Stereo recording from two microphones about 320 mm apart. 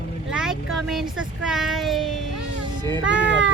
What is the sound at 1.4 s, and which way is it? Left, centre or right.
Speech, centre.